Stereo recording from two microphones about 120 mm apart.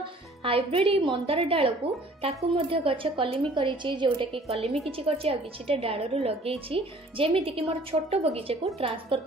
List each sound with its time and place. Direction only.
0.0 s a woman's voice: 50° right (ahead or behind)